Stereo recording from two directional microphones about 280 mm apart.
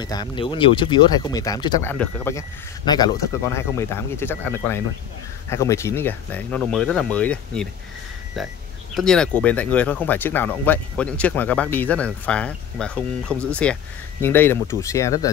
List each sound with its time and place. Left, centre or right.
0.0 s speech: centre